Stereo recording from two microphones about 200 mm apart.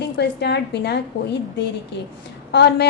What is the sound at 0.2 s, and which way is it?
A woman's voice, 55° left (ahead or behind).